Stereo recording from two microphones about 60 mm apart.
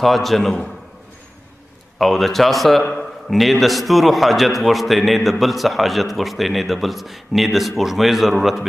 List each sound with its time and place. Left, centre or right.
0.0 s a man's voice: centre
2.0 s a man's voice: centre
2.8 s speech: centre
3.3 s a man's voice: centre